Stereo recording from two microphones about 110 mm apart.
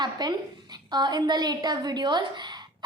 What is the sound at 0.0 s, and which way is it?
A woman's voice, 40° right (ahead or behind).